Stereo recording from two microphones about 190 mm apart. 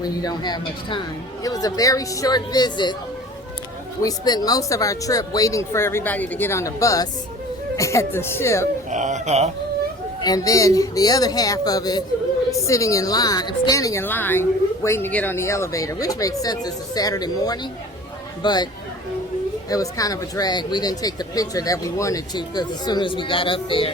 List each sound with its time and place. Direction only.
0.0 s speech: 20° left (ahead or behind)
4.0 s speech: 20° left (ahead or behind)
8.9 s speech: 40° right (ahead or behind)
10.2 s speech: 20° left (ahead or behind)
19.7 s speech: 20° left (ahead or behind)